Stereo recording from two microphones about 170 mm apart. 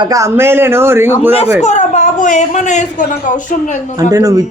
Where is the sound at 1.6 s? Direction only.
45° left (ahead or behind).